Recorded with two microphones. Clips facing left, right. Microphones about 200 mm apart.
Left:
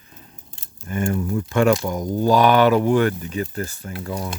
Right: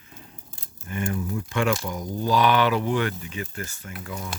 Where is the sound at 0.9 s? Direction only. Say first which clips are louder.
Left 5 dB; 45° left (ahead or behind).